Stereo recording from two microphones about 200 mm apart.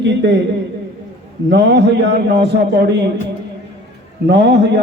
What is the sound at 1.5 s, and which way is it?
A man's voice, 60° right (ahead or behind).